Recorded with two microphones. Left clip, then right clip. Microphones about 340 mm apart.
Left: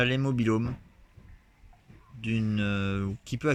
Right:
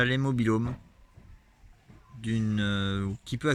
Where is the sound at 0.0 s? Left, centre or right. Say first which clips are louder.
Even; centre.